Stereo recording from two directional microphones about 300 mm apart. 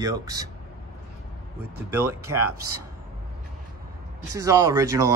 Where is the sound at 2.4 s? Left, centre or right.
Right.